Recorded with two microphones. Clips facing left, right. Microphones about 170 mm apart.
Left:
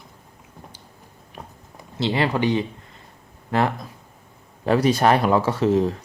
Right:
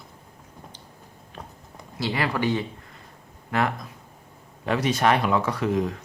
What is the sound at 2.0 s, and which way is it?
Speech, 25° left (ahead or behind).